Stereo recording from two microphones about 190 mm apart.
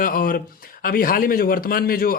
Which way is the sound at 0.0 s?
50° left (ahead or behind).